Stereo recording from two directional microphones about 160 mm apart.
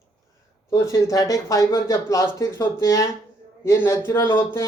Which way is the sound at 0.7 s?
20° left (ahead or behind).